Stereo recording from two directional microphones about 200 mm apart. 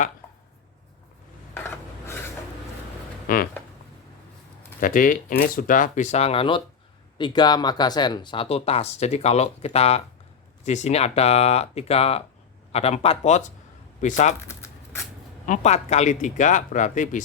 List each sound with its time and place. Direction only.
1.5 s filing: 10° left (ahead or behind)
3.3 s a sound: 45° left (ahead or behind)
4.8 s speech: 40° left (ahead or behind)
14.4 s shuffling cards: 15° left (ahead or behind)
15.4 s speech: 35° left (ahead or behind)